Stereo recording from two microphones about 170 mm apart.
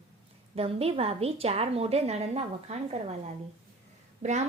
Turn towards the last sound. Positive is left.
turn(degrees=-45)  # may be behind; listen again after turning